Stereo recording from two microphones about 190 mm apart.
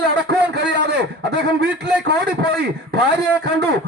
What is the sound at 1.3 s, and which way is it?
A man's voice, 65° right (ahead or behind).